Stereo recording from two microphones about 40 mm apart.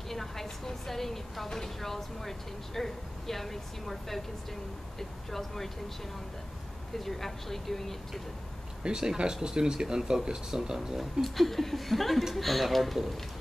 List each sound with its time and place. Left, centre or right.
0.1 s speech: centre
7.0 s speech: centre
8.8 s speech: centre
11.0 s speech: centre